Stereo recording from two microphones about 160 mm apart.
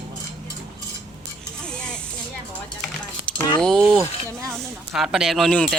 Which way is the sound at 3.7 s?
30° right (ahead or behind).